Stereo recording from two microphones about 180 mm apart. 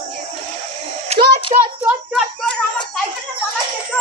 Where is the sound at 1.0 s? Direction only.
35° right (ahead or behind).